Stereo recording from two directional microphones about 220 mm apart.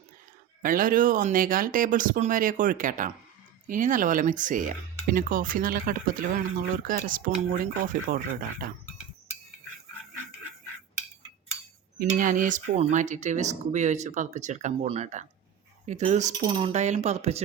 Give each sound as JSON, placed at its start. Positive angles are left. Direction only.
{"t": 0.6, "sound": "speech", "side_deg": -40}
{"t": 11.9, "sound": "speech", "side_deg": -35}